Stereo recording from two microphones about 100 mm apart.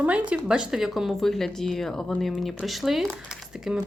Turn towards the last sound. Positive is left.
turn(degrees=-5)  # may be behind; listen again after turning